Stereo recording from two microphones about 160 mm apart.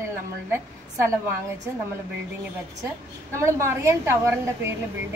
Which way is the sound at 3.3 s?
15° right (ahead or behind).